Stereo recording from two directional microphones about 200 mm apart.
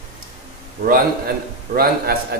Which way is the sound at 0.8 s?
50° right (ahead or behind).